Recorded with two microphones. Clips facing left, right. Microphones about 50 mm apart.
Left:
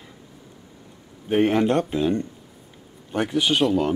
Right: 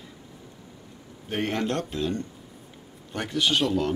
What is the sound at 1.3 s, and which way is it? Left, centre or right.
Speech, centre.